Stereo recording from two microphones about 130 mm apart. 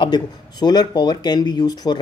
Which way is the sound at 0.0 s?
35° left (ahead or behind).